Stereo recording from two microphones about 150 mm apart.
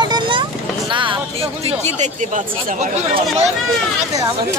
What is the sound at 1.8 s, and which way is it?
Speech, 55° right (ahead or behind).